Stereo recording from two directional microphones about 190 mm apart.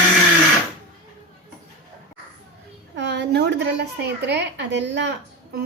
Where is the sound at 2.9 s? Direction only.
65° right (ahead or behind).